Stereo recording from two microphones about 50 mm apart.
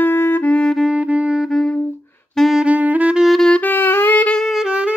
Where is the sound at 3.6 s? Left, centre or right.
Left.